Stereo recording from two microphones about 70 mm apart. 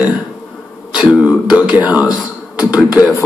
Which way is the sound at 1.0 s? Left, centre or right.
Centre.